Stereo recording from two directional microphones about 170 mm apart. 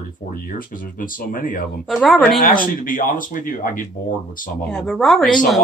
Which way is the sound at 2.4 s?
55° left (ahead or behind).